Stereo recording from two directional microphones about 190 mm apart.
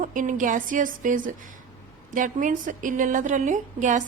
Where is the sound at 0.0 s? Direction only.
45° right (ahead or behind).